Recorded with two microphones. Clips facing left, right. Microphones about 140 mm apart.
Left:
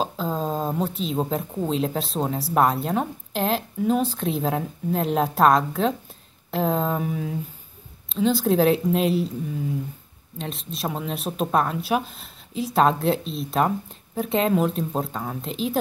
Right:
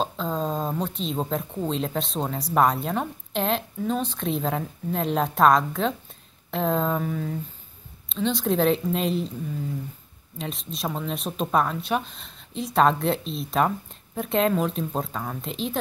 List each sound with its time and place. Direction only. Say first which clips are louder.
0.0 s speech: left 1 dB; 5° left (ahead or behind)
10.3 s speech: left 1 dB; centre (ahead or behind)